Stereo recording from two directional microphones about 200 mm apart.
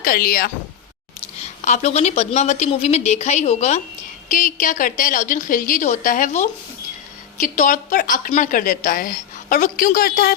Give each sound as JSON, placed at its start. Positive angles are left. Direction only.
{"t": 0.0, "sound": "a woman's voice", "side_deg": 45}
{"t": 1.2, "sound": "a woman's voice", "side_deg": 35}